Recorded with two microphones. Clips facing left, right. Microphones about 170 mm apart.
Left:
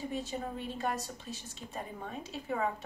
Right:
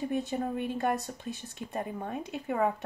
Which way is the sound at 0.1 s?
60° right (ahead or behind).